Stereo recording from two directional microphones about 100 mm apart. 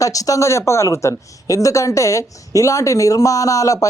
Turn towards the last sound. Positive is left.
turn(degrees=35)  # may be behind; listen again after turning